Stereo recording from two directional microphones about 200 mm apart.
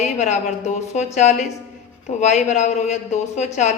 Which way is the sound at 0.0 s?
35° left (ahead or behind).